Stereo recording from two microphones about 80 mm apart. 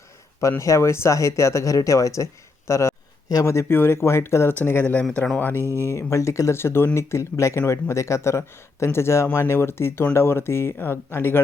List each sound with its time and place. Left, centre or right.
0.6 s speech: left
5.1 s speech: centre
5.4 s speech: left